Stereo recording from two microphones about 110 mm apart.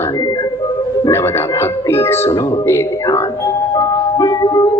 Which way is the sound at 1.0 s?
25° left (ahead or behind).